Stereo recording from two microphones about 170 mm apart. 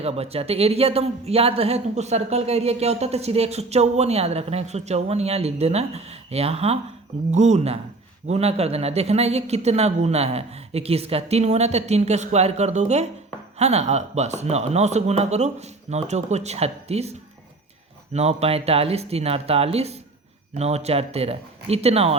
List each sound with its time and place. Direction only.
0.0 s speech: 35° right (ahead or behind)